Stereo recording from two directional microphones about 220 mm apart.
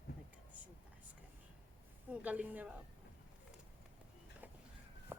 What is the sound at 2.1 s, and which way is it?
Speech, 5° right (ahead or behind).